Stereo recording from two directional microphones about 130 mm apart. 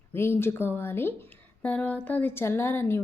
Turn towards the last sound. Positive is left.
turn(degrees=20)  # may be behind; listen again after turning